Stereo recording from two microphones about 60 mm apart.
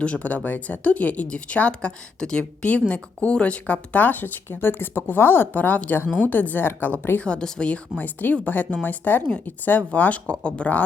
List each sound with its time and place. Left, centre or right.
0.0 s speech: left
7.3 s speech: centre